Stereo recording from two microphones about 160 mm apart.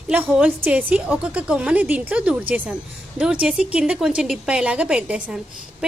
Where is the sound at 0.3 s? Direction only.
10° right (ahead or behind).